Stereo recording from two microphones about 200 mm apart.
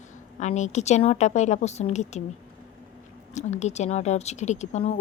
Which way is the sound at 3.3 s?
35° left (ahead or behind).